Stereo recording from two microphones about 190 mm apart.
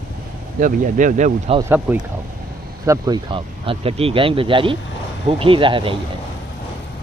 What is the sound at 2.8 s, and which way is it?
Speech, 20° right (ahead or behind).